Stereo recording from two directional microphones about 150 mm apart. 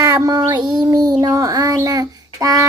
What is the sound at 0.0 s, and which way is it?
Child singing, 25° right (ahead or behind).